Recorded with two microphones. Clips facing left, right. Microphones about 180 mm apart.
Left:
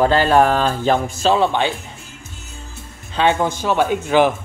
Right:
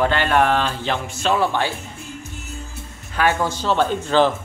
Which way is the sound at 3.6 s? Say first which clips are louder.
Left 2 dB; 10° left (ahead or behind).